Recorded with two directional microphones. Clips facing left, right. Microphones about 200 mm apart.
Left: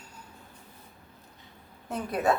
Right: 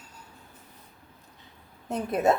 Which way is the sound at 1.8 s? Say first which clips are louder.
Right 3 dB; 25° right (ahead or behind).